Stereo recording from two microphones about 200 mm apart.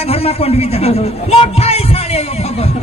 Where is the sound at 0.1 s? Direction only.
30° left (ahead or behind).